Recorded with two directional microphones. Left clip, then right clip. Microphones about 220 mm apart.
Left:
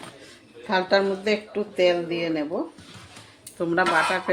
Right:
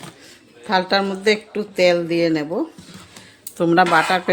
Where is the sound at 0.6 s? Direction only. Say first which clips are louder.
Right 3 dB; 30° right (ahead or behind); by 2.4 s 50° right (ahead or behind).